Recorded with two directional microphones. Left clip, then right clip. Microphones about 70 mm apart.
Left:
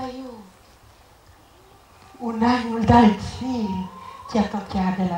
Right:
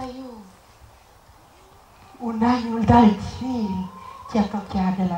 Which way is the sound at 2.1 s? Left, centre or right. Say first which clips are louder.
Left 1 dB; centre.